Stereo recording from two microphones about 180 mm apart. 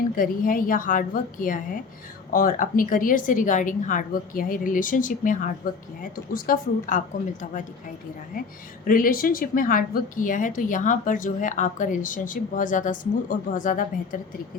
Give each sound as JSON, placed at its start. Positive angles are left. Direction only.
{"t": 0.2, "sound": "a woman's voice", "side_deg": 50}
{"t": 8.9, "sound": "a woman's voice", "side_deg": 50}